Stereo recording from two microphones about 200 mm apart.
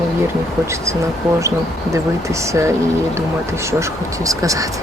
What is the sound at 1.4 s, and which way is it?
Speech, 15° right (ahead or behind).